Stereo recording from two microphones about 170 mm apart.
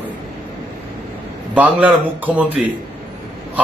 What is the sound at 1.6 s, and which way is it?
A man's voice, 10° right (ahead or behind).